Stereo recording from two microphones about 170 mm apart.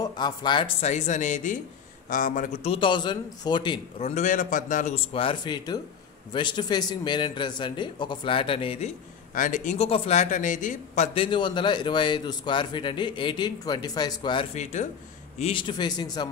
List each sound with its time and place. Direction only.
0.0 s a man's voice: 25° left (ahead or behind); by 2.7 s 50° left (ahead or behind)
2.7 s a man's voice: 30° left (ahead or behind)
4.1 s a man's voice: 45° left (ahead or behind)
4.9 s a man's voice: 35° left (ahead or behind); by 11.1 s 50° left (ahead or behind)
11.1 s a man's voice: 30° left (ahead or behind); by 14.9 s 45° left (ahead or behind)
15.3 s a man's voice: 35° left (ahead or behind)